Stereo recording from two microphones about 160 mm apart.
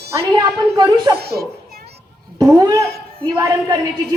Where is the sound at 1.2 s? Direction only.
85° right.